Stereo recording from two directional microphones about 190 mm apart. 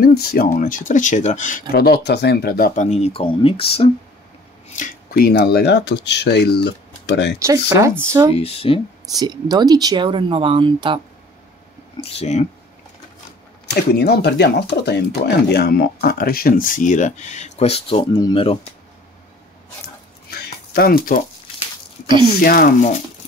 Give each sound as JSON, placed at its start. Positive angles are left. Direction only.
{"t": 0.0, "sound": "speech", "side_deg": 55}
{"t": 0.6, "sound": "speech", "side_deg": 45}
{"t": 4.7, "sound": "speech", "side_deg": 50}
{"t": 7.3, "sound": "speech", "side_deg": -15}
{"t": 8.4, "sound": "speech", "side_deg": 30}
{"t": 9.2, "sound": "speech", "side_deg": -20}
{"t": 12.0, "sound": "speech", "side_deg": 30}
{"t": 13.7, "sound": "speech", "side_deg": 55}
{"t": 20.2, "sound": "a sound", "side_deg": 55}
{"t": 22.0, "sound": "speech", "side_deg": -25}
{"t": 22.4, "sound": "speech", "side_deg": 50}